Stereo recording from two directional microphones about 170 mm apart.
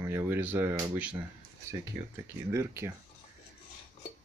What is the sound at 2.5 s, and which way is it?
Speech, 15° right (ahead or behind).